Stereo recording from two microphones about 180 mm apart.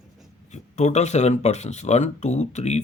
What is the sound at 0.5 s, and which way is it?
Speech, 40° left (ahead or behind).